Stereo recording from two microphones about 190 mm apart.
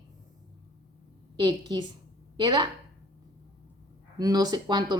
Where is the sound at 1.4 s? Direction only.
20° right (ahead or behind).